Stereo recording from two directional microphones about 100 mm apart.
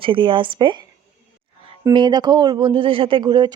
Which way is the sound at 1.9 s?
45° right (ahead or behind).